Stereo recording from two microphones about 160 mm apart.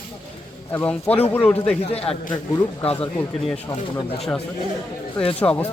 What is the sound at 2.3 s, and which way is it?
Speech, 25° left (ahead or behind).